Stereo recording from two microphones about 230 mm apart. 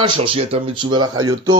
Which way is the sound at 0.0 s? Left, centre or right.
Right.